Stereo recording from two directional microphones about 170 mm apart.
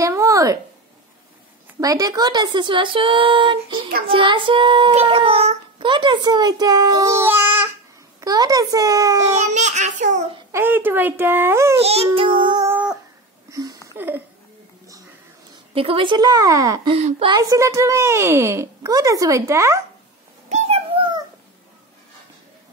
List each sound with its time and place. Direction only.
0.0 s a sound: 20° right (ahead or behind)
1.8 s child singing: 20° right (ahead or behind)
9.4 s a child's voice: 45° right (ahead or behind)
10.5 s speech: 10° right (ahead or behind)
11.8 s music: 35° right (ahead or behind)
12.6 s dog: 5° right (ahead or behind)
13.5 s a sound: 20° right (ahead or behind)
13.8 s speech: 10° right (ahead or behind)
15.7 s child singing: 35° right (ahead or behind)
16.9 s music: 35° right (ahead or behind)
17.4 s speech: 20° right (ahead or behind)
20.4 s a sound: 40° right (ahead or behind)